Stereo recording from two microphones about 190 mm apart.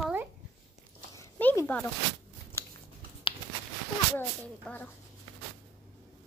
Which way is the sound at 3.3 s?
30° left (ahead or behind).